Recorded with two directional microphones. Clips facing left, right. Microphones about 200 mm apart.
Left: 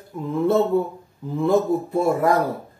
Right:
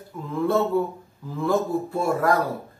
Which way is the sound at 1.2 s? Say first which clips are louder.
Left 4 dB; 20° left (ahead or behind).